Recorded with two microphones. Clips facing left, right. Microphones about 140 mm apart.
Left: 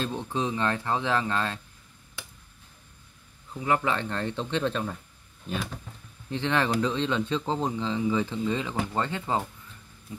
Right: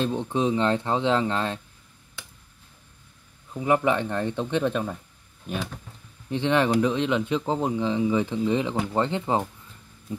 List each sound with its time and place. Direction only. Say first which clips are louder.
0.0 s speech: right 5 dB; 20° right (ahead or behind)
3.6 s speech: right 4 dB; 15° right (ahead or behind)
6.3 s speech: right 4 dB; 15° right (ahead or behind)